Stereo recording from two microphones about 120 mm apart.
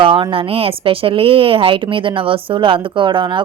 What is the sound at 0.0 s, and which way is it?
A woman's voice, 45° right (ahead or behind).